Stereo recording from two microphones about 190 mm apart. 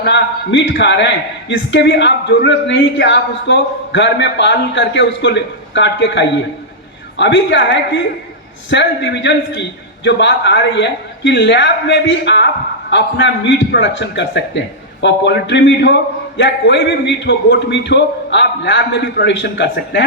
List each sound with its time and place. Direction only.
0.0 s a man's voice: 70° left (ahead or behind)